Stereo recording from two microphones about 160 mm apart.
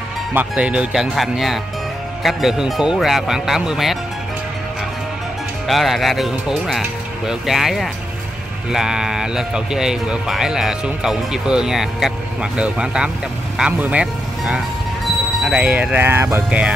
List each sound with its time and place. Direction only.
0.3 s speech: 10° right (ahead or behind)
5.7 s speech: centre (ahead or behind)